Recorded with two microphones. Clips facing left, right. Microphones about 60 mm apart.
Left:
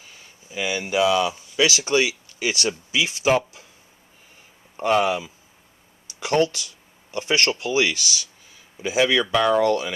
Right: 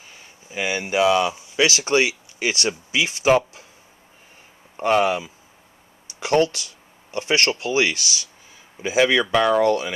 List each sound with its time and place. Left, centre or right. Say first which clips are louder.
0.2 s speech: right 1 dB; right
4.7 s speech: right 1 dB; centre
6.2 s speech: right 2 dB; right; by 9.9 s centre